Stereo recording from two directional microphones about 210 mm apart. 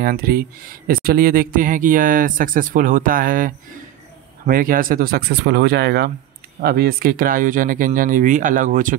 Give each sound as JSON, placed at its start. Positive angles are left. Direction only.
{"t": 0.0, "sound": "speech", "side_deg": -45}